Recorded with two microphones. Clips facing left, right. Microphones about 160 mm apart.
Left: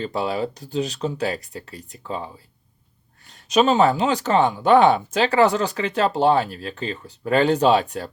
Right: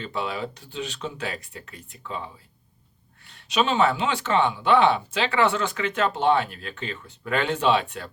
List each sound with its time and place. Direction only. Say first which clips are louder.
0.0 s speech: left 6 dB; 35° left (ahead or behind)